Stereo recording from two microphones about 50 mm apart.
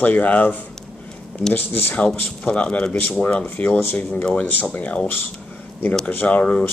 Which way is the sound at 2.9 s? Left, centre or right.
Left.